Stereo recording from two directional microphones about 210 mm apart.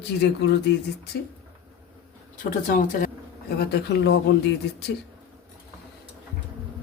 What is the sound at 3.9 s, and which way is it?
Speech, 55° left (ahead or behind).